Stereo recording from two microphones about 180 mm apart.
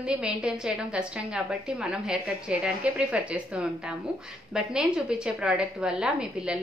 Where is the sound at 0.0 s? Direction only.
5° right (ahead or behind).